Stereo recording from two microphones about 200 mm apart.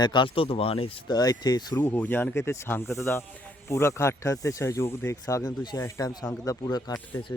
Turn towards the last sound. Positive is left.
turn(degrees=20)  # may be behind; listen again after turning